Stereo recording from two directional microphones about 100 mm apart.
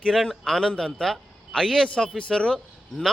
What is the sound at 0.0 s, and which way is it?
A man's voice, centre (ahead or behind).